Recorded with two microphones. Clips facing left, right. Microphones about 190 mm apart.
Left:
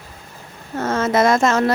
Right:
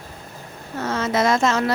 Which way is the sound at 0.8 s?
50° left (ahead or behind).